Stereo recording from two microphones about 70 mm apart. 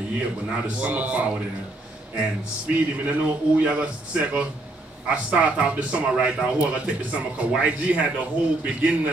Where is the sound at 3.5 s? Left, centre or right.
Right.